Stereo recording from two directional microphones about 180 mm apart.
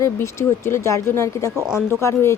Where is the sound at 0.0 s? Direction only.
15° left (ahead or behind).